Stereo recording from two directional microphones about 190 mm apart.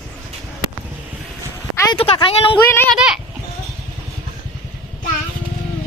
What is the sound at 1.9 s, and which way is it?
Speech, 30° left (ahead or behind).